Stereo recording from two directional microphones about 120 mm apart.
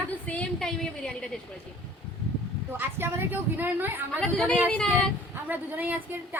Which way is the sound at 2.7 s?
20° right (ahead or behind).